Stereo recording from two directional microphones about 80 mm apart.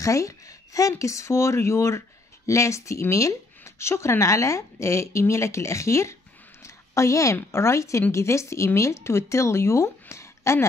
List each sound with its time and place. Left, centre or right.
0.0 s speech: left
6.6 s a sound: left
7.3 s speech: left